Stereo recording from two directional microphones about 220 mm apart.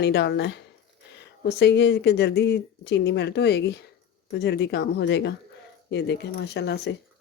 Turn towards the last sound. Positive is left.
turn(degrees=50)  # may be behind; listen again after turning